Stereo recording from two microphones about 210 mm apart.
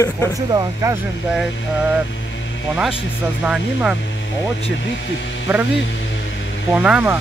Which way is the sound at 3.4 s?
5° right (ahead or behind).